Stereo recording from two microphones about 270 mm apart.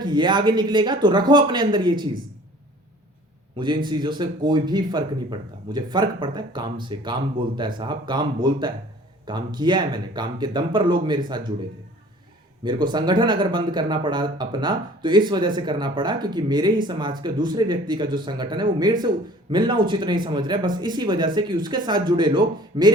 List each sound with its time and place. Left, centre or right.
0.0 s speech: centre
3.8 s speech: centre
12.6 s speech: centre